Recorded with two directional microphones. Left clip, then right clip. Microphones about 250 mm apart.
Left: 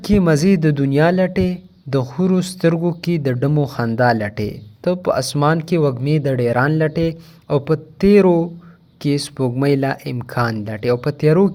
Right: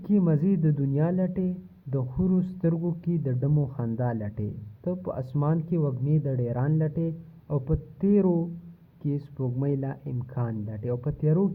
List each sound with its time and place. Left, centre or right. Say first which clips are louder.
0.0 s speech: left 11 dB; left